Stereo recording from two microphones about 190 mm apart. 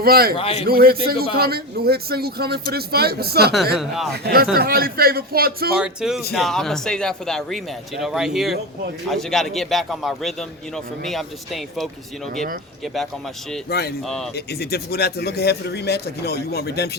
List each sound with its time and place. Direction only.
0.0 s a man's voice: 55° right (ahead or behind)
0.3 s a man's voice: 30° left (ahead or behind)
0.7 s a man's voice: 50° right (ahead or behind)
3.8 s speech: centre (ahead or behind)
4.1 s a man's voice: 55° right (ahead or behind)
5.7 s speech: 5° right (ahead or behind)
13.7 s speech: 55° left (ahead or behind)